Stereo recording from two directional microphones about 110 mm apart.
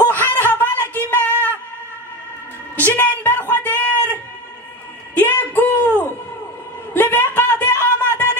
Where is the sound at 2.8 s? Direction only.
15° left (ahead or behind).